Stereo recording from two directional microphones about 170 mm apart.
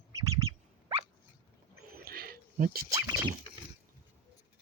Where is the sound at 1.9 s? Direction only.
60° right (ahead or behind).